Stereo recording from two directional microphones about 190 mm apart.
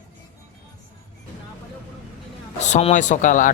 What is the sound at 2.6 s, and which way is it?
Speech, 35° left (ahead or behind).